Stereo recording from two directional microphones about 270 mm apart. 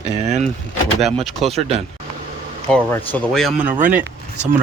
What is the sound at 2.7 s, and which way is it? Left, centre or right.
Speech, centre.